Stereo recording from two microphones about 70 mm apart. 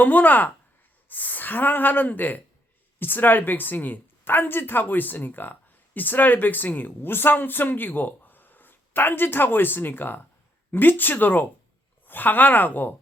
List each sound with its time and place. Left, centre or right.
0.0 s speech: left